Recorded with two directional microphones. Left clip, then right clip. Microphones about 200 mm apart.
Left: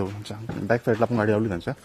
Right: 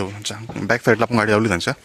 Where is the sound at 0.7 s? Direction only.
15° right (ahead or behind).